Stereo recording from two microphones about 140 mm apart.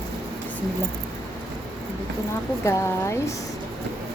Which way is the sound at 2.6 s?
20° left (ahead or behind).